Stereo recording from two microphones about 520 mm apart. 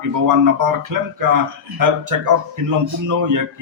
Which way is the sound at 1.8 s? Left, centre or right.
Right.